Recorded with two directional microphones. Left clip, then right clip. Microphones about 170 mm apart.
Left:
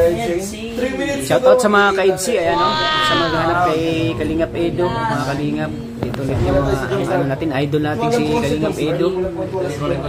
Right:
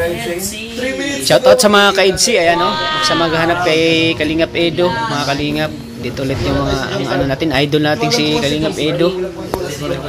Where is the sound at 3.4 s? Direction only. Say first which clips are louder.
Right 3 dB; 25° right (ahead or behind).